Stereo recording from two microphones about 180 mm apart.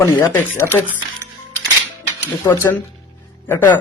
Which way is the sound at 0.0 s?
15° left (ahead or behind).